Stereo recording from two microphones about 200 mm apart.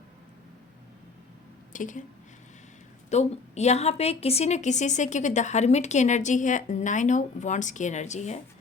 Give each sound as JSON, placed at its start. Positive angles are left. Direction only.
{"t": 1.7, "sound": "speech", "side_deg": 40}
{"t": 3.1, "sound": "a woman's voice", "side_deg": 35}